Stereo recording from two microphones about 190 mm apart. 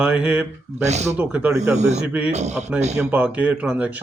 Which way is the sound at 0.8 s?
35° right (ahead or behind).